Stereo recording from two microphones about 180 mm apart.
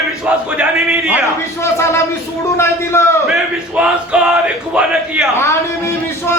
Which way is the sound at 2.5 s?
15° left (ahead or behind).